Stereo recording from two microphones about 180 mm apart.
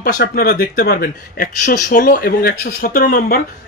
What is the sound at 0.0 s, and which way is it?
Speech, 55° left (ahead or behind).